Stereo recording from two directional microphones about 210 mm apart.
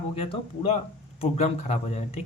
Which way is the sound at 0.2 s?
30° left (ahead or behind).